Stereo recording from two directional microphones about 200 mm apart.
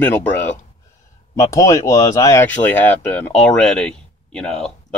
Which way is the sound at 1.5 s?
15° left (ahead or behind).